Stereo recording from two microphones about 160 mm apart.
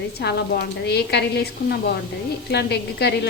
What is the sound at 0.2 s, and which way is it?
A woman's voice, 90° left.